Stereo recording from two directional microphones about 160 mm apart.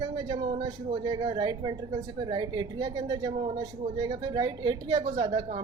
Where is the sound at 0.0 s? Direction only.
30° right (ahead or behind).